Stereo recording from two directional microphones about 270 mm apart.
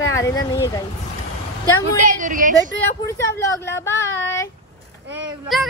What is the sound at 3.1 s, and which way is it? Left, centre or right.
A woman's voice, centre.